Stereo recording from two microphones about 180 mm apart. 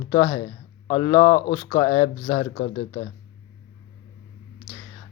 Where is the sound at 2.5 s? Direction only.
35° left (ahead or behind).